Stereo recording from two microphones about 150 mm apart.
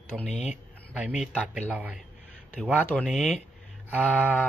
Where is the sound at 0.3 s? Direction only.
50° left (ahead or behind).